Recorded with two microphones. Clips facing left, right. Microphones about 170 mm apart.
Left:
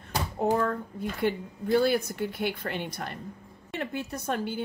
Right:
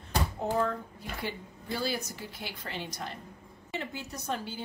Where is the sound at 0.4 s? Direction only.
55° left (ahead or behind).